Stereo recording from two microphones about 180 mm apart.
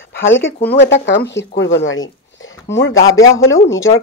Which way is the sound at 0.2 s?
90° left.